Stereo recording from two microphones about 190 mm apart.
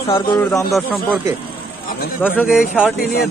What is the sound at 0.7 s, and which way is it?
Speech, 5° left (ahead or behind).